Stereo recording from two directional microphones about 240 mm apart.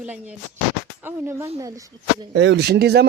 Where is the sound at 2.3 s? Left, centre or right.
Right.